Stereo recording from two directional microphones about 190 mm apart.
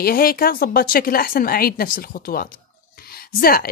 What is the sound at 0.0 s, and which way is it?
A woman's voice, 50° left (ahead or behind).